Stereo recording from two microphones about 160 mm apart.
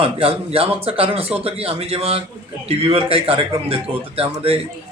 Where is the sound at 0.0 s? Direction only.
35° right (ahead or behind).